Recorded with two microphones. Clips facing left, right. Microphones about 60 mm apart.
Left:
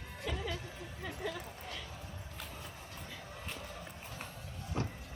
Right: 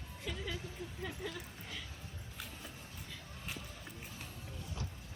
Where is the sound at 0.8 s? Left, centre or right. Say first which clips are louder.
Right 1 dB; left.